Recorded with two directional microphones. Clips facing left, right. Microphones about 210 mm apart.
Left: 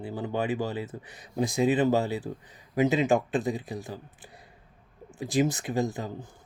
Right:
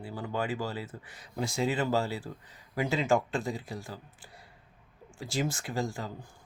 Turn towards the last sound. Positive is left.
turn(degrees=20)  # may be behind; listen again after turning